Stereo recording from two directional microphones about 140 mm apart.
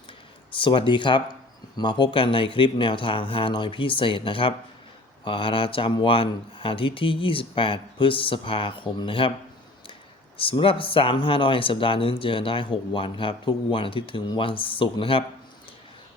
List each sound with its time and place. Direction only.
0.5 s speech: 35° left (ahead or behind)
10.3 s speech: 40° left (ahead or behind)